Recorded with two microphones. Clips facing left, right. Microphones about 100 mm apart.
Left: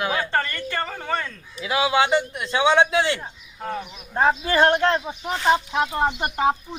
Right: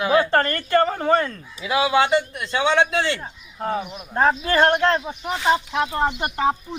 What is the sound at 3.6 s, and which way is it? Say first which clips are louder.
Speech: right 5 dB; 10° right (ahead or behind).